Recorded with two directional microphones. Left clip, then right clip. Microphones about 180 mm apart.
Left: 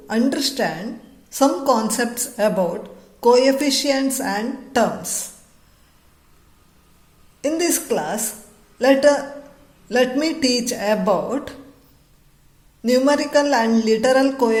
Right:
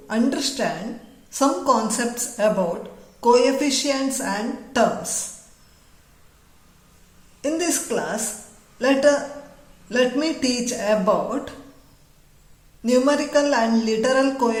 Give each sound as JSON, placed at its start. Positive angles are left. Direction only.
{"t": 0.1, "sound": "a woman's voice", "side_deg": 30}
{"t": 7.4, "sound": "a woman's voice", "side_deg": 30}
{"t": 12.8, "sound": "speech", "side_deg": 30}